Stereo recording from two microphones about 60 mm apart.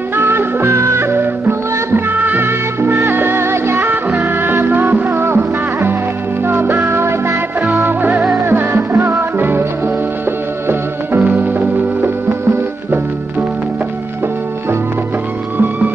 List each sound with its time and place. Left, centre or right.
0.1 s music: right
10.7 s music: right
15.5 s music: right